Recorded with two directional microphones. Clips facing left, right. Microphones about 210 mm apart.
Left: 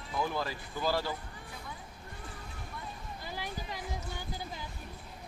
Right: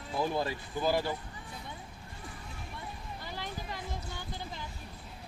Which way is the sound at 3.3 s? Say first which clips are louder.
Even; 10° left (ahead or behind).